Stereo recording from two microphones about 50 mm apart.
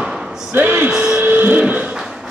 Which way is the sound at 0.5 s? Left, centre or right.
Right.